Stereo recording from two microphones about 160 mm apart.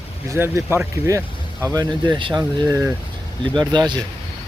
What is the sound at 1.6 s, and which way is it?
Speech, 25° right (ahead or behind).